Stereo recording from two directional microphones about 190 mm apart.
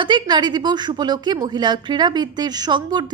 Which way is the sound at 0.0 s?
25° right (ahead or behind).